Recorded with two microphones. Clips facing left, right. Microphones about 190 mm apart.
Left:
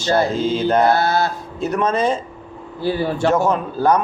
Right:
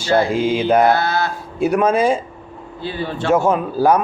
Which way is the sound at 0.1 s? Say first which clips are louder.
Right 1 dB; 10° right (ahead or behind).